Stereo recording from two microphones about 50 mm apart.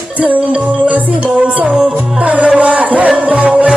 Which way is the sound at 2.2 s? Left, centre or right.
Right.